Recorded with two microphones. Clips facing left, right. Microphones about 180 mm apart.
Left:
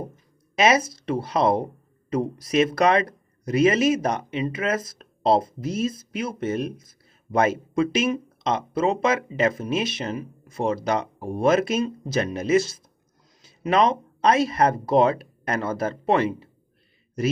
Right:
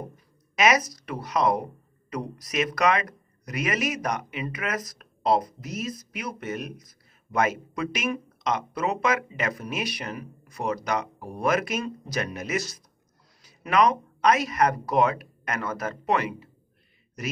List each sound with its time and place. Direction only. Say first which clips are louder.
0.1 s speech: left 7 dB; 25° left (ahead or behind)